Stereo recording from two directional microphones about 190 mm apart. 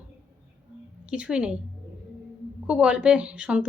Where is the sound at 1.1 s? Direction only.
5° right (ahead or behind).